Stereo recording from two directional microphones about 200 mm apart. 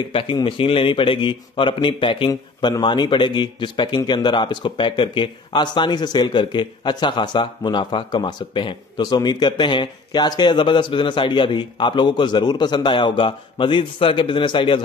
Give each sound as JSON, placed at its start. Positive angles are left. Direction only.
{"t": 0.1, "sound": "a man's voice", "side_deg": 25}